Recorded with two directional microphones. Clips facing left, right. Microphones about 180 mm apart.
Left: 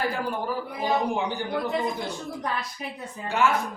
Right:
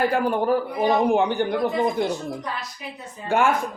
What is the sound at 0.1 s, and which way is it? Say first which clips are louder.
A man's voice: right 8 dB; 60° right (ahead or behind).